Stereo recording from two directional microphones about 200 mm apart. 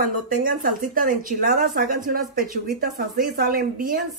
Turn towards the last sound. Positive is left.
turn(degrees=-45)  # may be behind; listen again after turning